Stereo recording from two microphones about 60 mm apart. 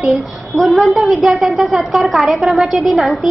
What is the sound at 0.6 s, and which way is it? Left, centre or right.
A woman's voice, centre.